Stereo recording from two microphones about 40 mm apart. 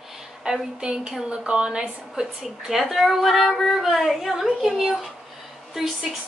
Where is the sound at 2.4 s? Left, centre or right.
Centre.